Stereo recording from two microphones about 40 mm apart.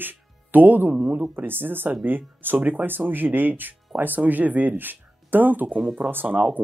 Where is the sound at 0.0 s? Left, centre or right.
Right.